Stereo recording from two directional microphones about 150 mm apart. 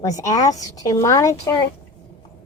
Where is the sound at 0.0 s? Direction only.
25° left (ahead or behind).